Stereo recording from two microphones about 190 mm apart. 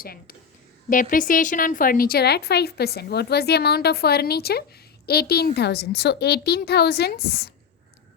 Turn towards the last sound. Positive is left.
turn(degrees=55)  # may be behind; listen again after turning